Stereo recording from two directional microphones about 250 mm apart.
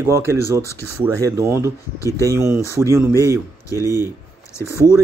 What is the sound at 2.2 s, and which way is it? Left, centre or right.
Speech, centre.